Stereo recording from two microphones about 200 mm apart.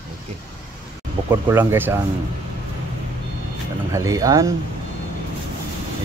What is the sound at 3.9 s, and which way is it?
Speech, 15° right (ahead or behind).